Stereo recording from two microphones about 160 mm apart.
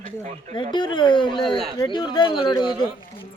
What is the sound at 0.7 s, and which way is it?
A woman's voice, 30° left (ahead or behind).